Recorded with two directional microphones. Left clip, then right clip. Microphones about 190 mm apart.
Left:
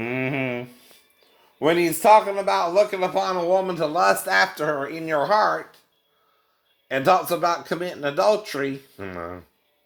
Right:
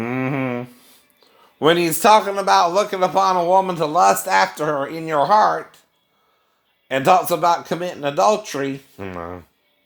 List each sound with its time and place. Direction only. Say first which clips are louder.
0.0 s a sound: right 2 dB; 35° right (ahead or behind)
1.5 s a man's voice: right 4 dB; 45° right (ahead or behind)
6.8 s a man's voice: right 4 dB; 40° right (ahead or behind)